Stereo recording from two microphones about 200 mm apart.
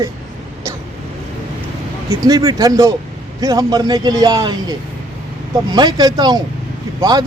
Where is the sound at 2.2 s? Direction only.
20° right (ahead or behind).